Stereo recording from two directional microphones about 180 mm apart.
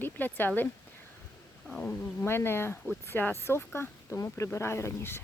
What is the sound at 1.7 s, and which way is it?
Speech, 10° left (ahead or behind).